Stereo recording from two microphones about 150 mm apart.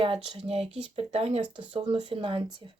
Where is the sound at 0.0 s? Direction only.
40° right (ahead or behind).